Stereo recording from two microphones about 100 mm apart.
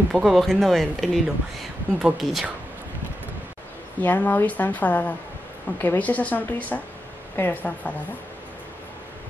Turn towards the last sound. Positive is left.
turn(degrees=20)  # may be behind; listen again after turning